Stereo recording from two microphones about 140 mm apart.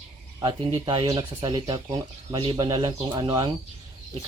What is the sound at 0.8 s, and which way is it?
Speech, 30° right (ahead or behind).